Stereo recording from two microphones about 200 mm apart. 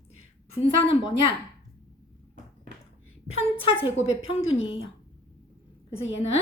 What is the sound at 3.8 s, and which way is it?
A woman's voice, 30° left (ahead or behind).